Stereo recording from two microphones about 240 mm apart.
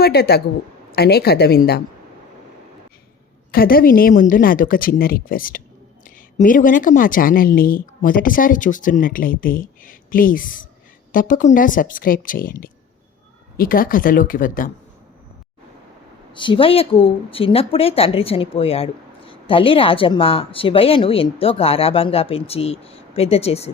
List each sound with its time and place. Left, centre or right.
0.0 s a woman's voice: left
3.5 s a woman's voice: left
16.3 s speech: left